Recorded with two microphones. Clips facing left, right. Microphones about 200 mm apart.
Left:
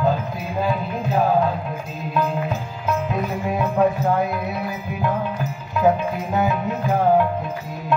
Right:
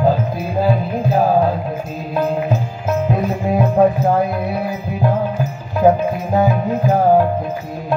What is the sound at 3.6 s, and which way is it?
Music, 35° right (ahead or behind).